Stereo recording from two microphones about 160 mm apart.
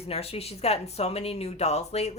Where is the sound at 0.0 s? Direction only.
40° left (ahead or behind).